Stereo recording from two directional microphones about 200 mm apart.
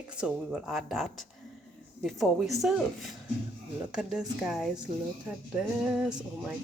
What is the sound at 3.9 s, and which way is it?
Speech, 5° right (ahead or behind).